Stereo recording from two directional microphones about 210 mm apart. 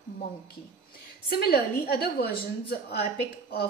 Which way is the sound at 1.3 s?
45° left (ahead or behind).